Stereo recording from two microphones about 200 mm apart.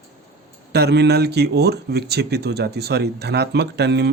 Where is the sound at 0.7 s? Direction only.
55° right (ahead or behind).